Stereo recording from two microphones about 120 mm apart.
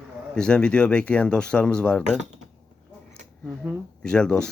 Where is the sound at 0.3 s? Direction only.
10° left (ahead or behind).